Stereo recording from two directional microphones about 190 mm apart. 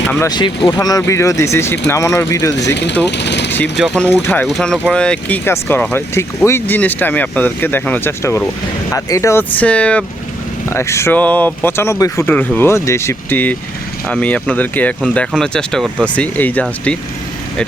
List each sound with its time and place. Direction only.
0.1 s speech: 15° left (ahead or behind)
2.6 s speech: 65° left (ahead or behind)
3.8 s speech: centre (ahead or behind)